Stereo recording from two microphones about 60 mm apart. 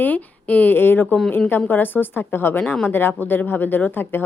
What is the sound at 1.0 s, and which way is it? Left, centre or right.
Speech, centre.